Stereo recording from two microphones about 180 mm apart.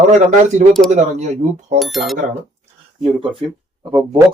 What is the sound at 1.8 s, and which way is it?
Speech, centre (ahead or behind).